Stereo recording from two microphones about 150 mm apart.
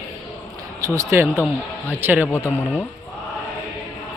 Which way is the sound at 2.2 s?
15° left (ahead or behind).